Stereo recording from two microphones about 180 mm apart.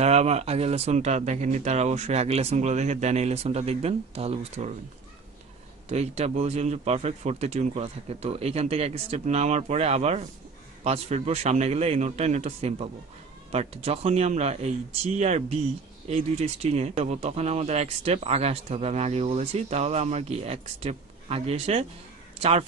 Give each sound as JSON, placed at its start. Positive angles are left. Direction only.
{"t": 0.0, "sound": "speech", "side_deg": -35}
{"t": 5.9, "sound": "speech", "side_deg": -35}